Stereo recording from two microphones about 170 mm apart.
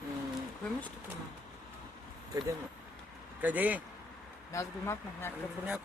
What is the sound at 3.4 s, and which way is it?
Speech, 10° right (ahead or behind).